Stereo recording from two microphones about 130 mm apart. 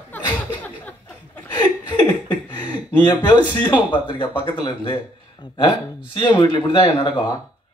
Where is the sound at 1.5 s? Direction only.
35° left (ahead or behind).